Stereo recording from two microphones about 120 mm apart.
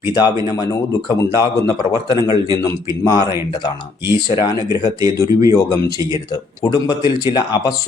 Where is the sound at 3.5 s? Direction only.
35° left (ahead or behind).